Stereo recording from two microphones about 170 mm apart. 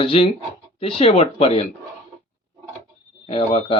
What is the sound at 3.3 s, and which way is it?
Speech, 35° left (ahead or behind).